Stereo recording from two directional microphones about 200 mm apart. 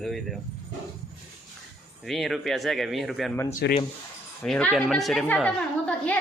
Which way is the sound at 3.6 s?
60° left (ahead or behind).